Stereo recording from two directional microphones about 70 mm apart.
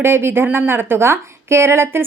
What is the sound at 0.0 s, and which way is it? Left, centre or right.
A woman's voice, right.